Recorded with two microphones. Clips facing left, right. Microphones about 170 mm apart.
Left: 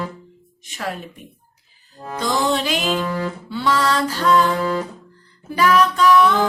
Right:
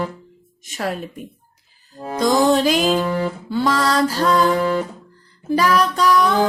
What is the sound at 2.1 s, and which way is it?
Music, 45° right (ahead or behind).